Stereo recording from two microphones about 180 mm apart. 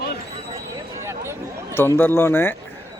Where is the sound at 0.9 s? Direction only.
15° right (ahead or behind).